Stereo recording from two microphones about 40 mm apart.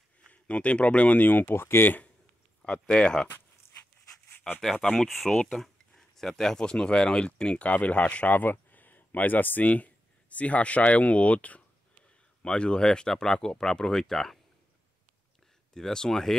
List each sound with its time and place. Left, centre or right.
0.3 s speech: left
1.2 s speech: left
2.6 s speech: left
5.0 s speech: centre; by 8.3 s left
8.3 s speech: left
12.4 s speech: left; by 14.4 s centre
15.7 s speech: centre